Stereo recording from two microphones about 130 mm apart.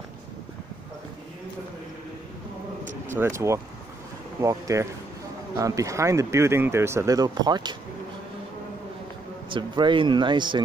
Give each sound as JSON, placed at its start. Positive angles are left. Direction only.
{"t": 3.1, "sound": "speech", "side_deg": -20}
{"t": 9.5, "sound": "speech", "side_deg": -35}